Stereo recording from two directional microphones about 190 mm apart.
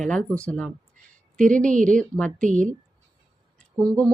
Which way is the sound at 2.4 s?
40° right (ahead or behind).